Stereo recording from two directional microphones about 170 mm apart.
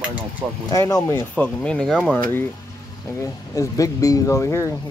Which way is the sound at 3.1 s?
20° left (ahead or behind).